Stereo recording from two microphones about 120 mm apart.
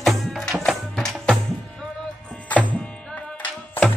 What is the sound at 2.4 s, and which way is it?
Music, 15° left (ahead or behind).